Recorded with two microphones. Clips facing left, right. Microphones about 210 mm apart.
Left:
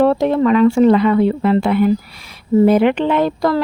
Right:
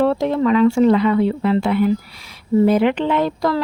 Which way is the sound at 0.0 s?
55° left (ahead or behind).